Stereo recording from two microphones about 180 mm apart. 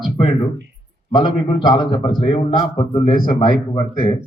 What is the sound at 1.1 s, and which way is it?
A man's voice, 25° left (ahead or behind).